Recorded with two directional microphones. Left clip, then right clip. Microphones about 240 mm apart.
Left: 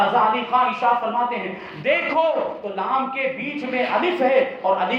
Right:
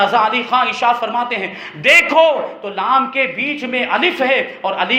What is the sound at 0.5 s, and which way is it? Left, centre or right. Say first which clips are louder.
Speech: right 4 dB; right.